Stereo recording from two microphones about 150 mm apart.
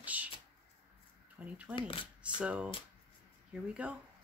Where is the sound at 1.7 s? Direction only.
35° left (ahead or behind).